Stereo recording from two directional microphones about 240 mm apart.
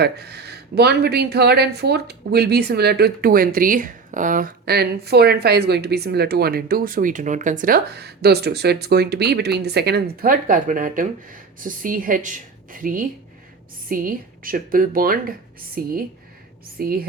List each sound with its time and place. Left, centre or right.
0.0 s speech: right